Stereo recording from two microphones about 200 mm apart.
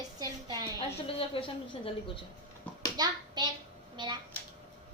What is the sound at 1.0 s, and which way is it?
A woman's voice, 25° left (ahead or behind).